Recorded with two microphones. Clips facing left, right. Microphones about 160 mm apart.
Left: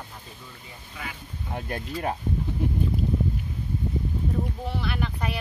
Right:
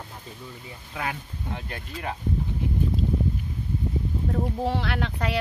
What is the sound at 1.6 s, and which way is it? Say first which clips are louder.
Speech: left 5 dB; 45° left (ahead or behind).